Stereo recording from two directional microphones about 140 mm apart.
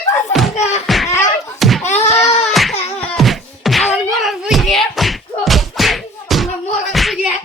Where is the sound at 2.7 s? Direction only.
50° left (ahead or behind).